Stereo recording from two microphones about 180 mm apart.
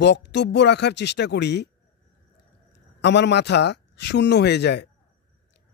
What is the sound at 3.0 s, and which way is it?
Speech, 70° left (ahead or behind).